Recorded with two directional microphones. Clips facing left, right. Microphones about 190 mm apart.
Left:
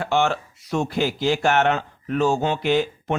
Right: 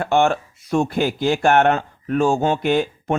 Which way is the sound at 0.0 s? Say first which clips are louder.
Right 4 dB; 50° right (ahead or behind).